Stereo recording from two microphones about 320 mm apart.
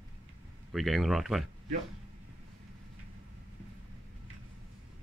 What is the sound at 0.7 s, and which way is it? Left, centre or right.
Speech, centre.